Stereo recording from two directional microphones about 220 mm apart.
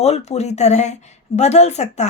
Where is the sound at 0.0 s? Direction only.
30° left (ahead or behind).